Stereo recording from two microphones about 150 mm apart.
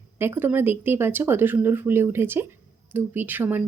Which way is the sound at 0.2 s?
15° right (ahead or behind).